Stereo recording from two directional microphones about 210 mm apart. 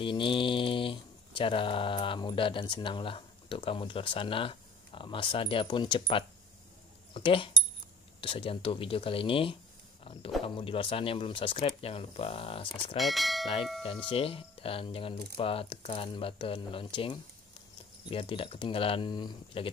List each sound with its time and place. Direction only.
0.0 s speech: 25° left (ahead or behind)
12.9 s speech: centre (ahead or behind)
14.1 s speech: 25° left (ahead or behind)